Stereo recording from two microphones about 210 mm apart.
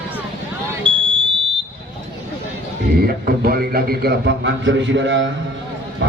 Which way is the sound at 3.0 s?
45° right (ahead or behind).